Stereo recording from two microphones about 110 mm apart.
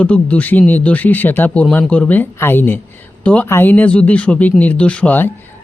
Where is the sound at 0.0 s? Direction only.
10° left (ahead or behind).